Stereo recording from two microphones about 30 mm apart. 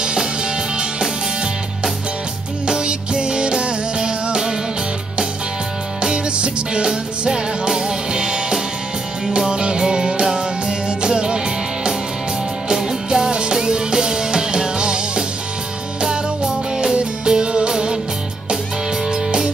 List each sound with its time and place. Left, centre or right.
0.0 s music: right
2.6 s music: right
5.9 s music: right
19.0 s music: right